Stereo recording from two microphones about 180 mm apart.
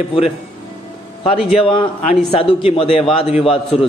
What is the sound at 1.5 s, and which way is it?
A man's voice, 30° left (ahead or behind).